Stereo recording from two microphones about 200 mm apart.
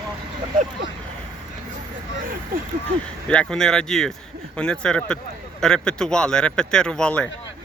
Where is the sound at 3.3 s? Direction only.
5° left (ahead or behind).